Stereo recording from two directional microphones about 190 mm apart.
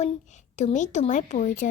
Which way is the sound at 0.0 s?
40° left (ahead or behind).